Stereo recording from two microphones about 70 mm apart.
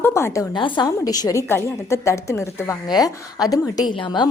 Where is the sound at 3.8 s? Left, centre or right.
Left.